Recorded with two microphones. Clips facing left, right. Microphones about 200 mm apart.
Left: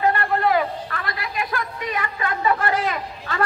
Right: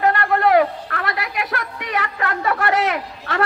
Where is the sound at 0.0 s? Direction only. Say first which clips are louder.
Right 3 dB; 70° right (ahead or behind).